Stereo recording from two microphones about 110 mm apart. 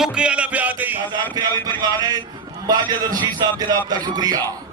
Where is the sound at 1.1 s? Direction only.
40° right (ahead or behind).